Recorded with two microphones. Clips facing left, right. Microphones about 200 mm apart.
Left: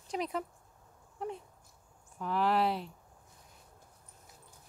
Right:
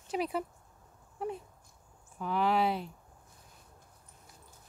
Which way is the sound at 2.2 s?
Centre (ahead or behind).